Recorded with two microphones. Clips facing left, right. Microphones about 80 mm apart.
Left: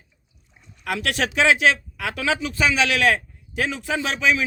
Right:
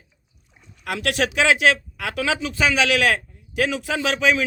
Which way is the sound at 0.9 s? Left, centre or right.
Right.